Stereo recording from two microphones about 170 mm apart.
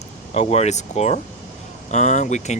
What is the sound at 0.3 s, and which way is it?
Speech, 40° left (ahead or behind).